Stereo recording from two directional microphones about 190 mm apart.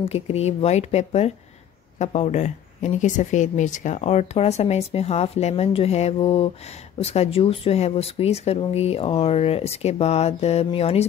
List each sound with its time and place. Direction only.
0.0 s speech: 30° left (ahead or behind)